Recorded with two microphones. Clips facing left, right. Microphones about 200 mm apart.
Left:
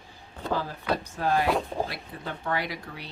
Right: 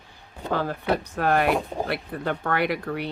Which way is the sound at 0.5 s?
60° right (ahead or behind).